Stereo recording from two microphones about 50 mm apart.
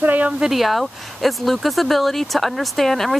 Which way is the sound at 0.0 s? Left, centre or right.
Right.